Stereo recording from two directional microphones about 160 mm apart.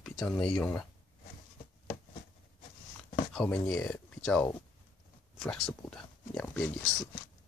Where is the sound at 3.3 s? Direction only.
5° left (ahead or behind).